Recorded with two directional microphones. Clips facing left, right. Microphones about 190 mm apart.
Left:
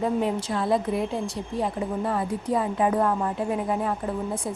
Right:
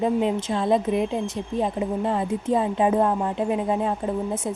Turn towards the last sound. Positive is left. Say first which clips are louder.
# right 3 dB
turn(degrees=-20)  # may be behind; listen again after turning